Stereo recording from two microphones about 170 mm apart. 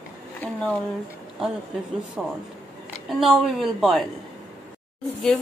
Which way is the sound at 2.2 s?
5° right (ahead or behind).